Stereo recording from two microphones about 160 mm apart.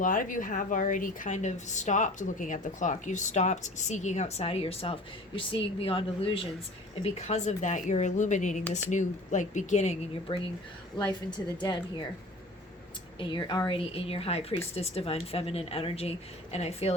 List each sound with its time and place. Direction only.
0.0 s a woman's voice: 55° left (ahead or behind); by 6.5 s 35° left (ahead or behind)
7.2 s a woman's voice: 45° left (ahead or behind)
10.9 s a woman's voice: 25° left (ahead or behind)
13.1 s a woman's voice: 30° left (ahead or behind)